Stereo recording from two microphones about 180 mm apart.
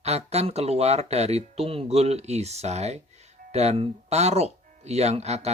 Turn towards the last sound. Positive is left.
turn(degrees=-35)  # may be behind; listen again after turning